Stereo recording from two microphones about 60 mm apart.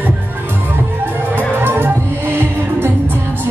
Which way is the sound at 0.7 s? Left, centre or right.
Right.